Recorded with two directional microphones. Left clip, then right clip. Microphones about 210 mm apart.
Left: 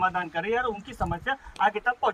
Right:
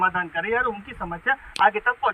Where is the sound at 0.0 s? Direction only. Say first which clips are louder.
Right 4 dB; 30° left (ahead or behind).